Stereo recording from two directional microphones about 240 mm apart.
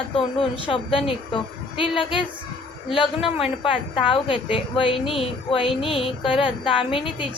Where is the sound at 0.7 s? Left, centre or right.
Left.